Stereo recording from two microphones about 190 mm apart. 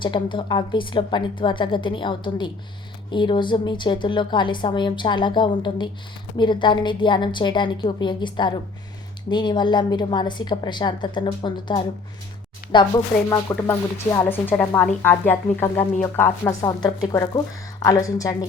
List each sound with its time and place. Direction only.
0.0 s a woman's voice: 25° left (ahead or behind)